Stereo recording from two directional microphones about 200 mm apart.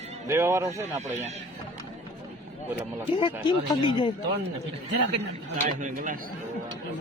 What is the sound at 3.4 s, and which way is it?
Speech, 25° left (ahead or behind).